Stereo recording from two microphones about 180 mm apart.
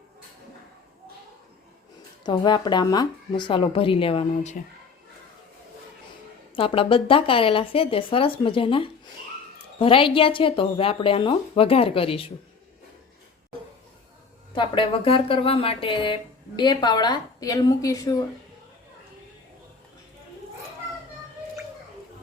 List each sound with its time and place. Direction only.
2.2 s speech: 25° left (ahead or behind)
6.6 s speech: 30° left (ahead or behind)
14.5 s speech: 30° left (ahead or behind)